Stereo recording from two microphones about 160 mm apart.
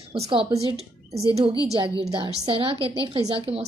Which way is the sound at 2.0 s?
35° right (ahead or behind).